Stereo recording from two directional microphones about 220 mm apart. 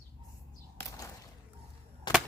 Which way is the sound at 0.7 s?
15° left (ahead or behind).